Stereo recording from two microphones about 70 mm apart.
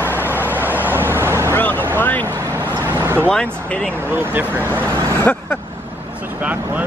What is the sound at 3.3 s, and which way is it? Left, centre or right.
Speech, centre.